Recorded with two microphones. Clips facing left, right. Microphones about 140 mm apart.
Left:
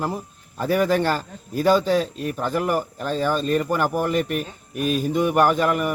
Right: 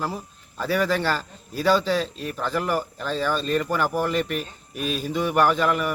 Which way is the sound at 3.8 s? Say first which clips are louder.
Left 2 dB; 15° left (ahead or behind).